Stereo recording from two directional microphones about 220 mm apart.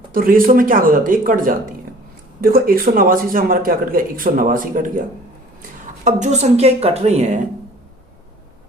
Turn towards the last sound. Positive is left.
turn(degrees=-30)  # may be behind; listen again after turning